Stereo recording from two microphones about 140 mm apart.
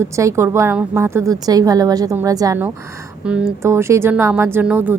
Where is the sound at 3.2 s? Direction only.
5° right (ahead or behind).